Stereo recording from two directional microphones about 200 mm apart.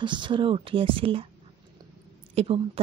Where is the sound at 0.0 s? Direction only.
25° right (ahead or behind).